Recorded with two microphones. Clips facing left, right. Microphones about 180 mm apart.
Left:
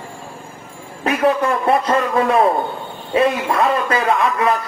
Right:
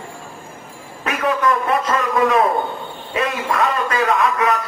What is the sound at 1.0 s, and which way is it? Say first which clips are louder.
A man's voice: left 3 dB; 30° left (ahead or behind).